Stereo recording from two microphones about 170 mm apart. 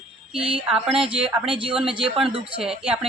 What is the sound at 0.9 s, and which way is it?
Speech, 30° right (ahead or behind).